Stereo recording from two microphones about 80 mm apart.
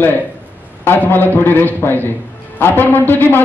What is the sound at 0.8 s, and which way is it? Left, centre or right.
A man's voice, left.